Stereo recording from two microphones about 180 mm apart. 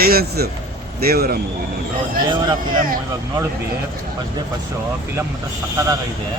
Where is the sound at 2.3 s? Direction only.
25° right (ahead or behind).